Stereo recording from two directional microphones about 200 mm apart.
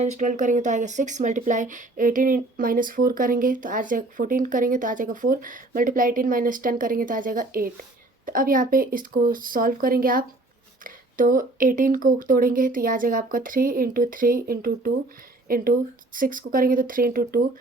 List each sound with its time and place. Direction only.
0.0 s a woman's voice: 35° right (ahead or behind)